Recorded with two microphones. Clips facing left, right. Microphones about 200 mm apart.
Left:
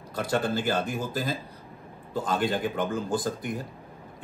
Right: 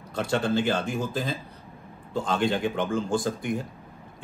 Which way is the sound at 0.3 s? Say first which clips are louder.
Right 2 dB; 5° left (ahead or behind).